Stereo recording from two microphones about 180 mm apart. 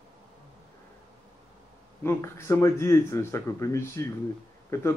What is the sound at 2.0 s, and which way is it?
Speech, 15° left (ahead or behind).